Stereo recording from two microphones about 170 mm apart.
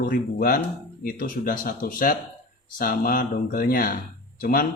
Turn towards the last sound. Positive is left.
turn(degrees=55)  # may be behind; listen again after turning